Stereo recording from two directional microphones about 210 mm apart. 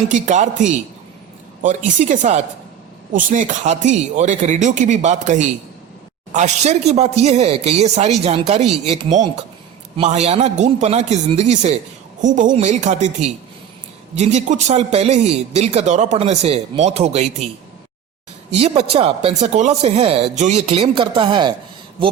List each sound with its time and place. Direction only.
0.1 s speech: 35° right (ahead or behind)
18.5 s speech: 30° right (ahead or behind)